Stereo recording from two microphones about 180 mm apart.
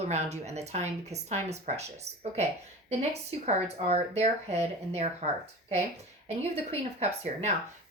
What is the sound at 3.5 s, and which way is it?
Speech, 35° right (ahead or behind).